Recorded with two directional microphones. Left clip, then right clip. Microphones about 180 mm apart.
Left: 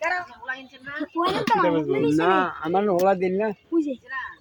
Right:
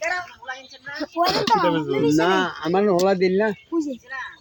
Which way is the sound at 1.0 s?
40° right (ahead or behind).